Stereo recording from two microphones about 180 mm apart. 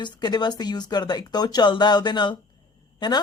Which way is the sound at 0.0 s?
25° left (ahead or behind).